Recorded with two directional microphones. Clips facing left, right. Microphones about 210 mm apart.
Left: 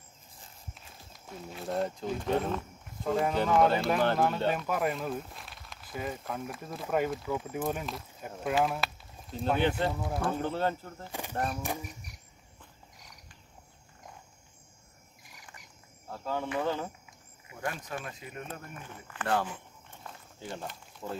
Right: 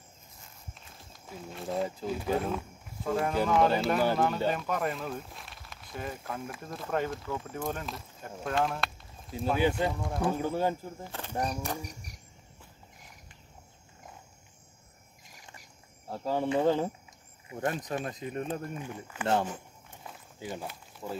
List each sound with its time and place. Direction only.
0.7 s speech: centre (ahead or behind)
4.5 s speech: 5° left (ahead or behind)
9.3 s speech: 5° right (ahead or behind)
10.3 s speech: 10° right (ahead or behind)
11.1 s speech: 15° left (ahead or behind)
16.1 s speech: 30° right (ahead or behind)
18.5 s speech: 15° right (ahead or behind)